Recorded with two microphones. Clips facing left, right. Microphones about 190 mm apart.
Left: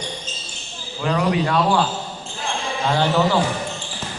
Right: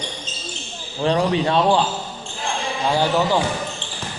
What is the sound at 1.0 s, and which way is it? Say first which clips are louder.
Speech: right 2 dB; 30° right (ahead or behind).